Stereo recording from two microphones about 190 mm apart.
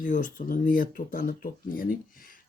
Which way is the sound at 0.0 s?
45° left (ahead or behind).